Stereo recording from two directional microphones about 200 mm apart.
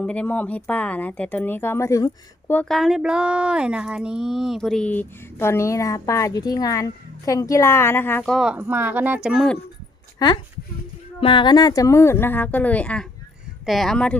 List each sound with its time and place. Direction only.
0.0 s speech: 5° left (ahead or behind)
10.2 s speech: 20° left (ahead or behind); by 14.2 s 5° left (ahead or behind)